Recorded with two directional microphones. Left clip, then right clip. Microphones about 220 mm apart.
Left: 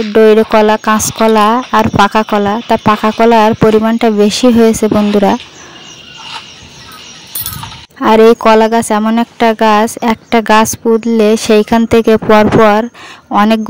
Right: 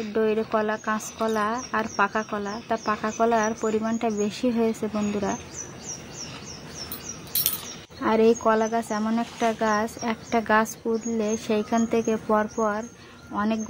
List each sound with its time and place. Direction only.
0.0 s speech: 50° left (ahead or behind)
8.0 s speech: 45° left (ahead or behind)